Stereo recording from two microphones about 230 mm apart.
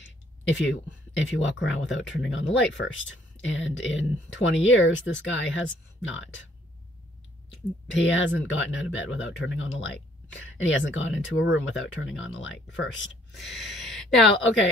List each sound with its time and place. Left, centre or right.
0.0 s speech: left
7.5 s speech: left
13.3 s speech: centre